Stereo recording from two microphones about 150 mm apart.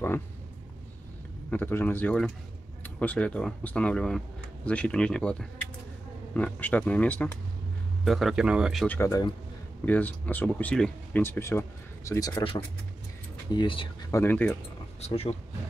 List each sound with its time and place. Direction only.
1.5 s speech: 15° left (ahead or behind); by 8.8 s 5° right (ahead or behind)
8.8 s speech: 10° left (ahead or behind)
13.5 s speech: 30° left (ahead or behind)
14.1 s speech: 15° left (ahead or behind)
15.0 s speech: 45° left (ahead or behind)